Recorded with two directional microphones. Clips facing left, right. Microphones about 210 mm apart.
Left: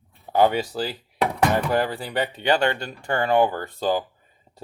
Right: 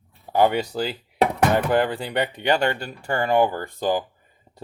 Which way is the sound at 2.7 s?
10° right (ahead or behind).